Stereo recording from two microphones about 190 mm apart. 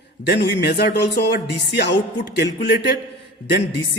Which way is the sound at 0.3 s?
60° left (ahead or behind).